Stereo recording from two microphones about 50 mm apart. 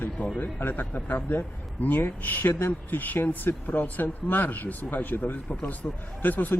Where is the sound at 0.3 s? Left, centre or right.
Left.